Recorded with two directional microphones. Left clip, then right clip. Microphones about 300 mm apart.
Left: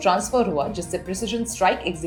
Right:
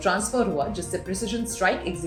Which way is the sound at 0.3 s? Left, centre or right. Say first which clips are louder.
Left 3 dB; centre.